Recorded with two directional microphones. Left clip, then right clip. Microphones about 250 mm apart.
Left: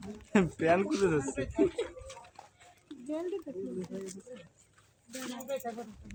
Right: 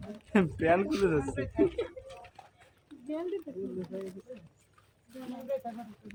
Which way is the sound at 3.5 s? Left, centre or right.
Centre.